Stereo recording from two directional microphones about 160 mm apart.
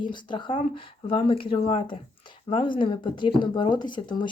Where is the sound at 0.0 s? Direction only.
30° left (ahead or behind).